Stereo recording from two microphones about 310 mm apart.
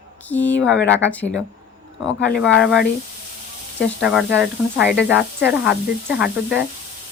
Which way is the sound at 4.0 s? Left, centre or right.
Centre.